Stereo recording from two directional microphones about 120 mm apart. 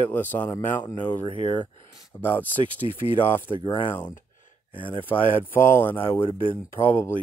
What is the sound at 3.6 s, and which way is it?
Speech, 45° left (ahead or behind).